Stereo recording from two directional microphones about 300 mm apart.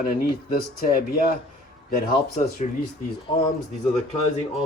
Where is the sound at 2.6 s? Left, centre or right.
Left.